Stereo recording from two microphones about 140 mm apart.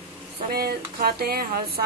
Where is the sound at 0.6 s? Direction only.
90° right.